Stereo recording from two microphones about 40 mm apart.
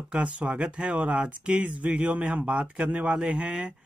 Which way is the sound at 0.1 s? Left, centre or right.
Right.